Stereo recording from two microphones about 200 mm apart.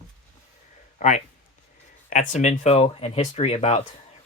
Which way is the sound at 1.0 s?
40° left (ahead or behind).